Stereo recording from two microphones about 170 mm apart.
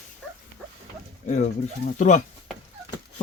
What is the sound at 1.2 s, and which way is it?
Speech, 45° left (ahead or behind).